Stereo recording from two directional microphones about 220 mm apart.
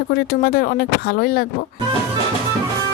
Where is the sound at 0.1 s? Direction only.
45° left (ahead or behind).